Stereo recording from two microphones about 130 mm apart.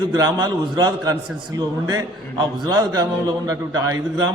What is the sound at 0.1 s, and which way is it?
A man's voice, 30° right (ahead or behind).